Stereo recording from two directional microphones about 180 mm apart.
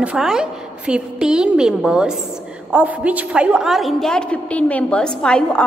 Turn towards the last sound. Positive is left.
turn(degrees=5)  # may be behind; listen again after turning